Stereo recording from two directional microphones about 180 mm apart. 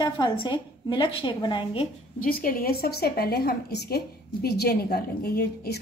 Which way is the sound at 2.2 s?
50° left (ahead or behind).